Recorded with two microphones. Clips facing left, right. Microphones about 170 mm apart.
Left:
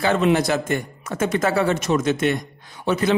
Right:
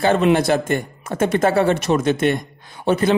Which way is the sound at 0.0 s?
50° right (ahead or behind).